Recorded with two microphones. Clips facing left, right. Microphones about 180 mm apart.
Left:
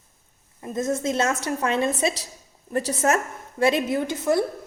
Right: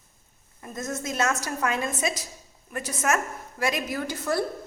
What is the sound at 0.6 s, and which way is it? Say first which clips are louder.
A woman's voice: left 8 dB; 25° left (ahead or behind).